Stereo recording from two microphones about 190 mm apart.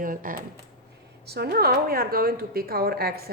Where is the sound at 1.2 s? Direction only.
55° right (ahead or behind).